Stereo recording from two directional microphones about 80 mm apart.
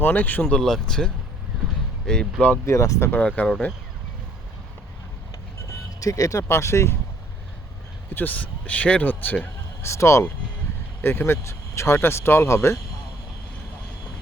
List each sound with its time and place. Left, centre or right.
0.0 s speech: left
0.6 s speech: centre
2.6 s speech: left
3.1 s speech: centre
5.6 s speech: left
8.1 s speech: left
9.8 s speech: left